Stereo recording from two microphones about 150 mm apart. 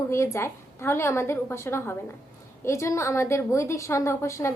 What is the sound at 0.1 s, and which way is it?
A woman's voice, 20° left (ahead or behind).